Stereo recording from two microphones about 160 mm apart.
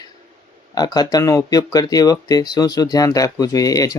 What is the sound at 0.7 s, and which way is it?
Speech, 25° left (ahead or behind).